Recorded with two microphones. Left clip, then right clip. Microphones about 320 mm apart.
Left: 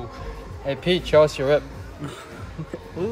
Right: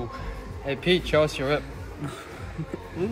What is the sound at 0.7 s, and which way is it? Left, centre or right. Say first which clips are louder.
Speech: left 2 dB; left.